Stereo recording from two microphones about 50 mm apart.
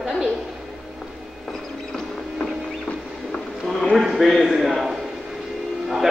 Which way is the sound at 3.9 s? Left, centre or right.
Centre.